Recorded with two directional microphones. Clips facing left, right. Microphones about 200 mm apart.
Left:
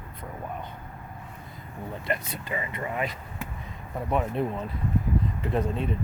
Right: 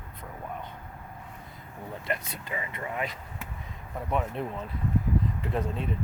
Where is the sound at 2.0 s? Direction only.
Centre (ahead or behind).